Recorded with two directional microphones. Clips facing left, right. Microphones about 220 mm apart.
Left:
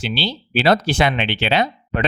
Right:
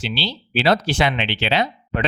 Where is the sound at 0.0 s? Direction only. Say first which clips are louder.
Left 2 dB; 50° left (ahead or behind).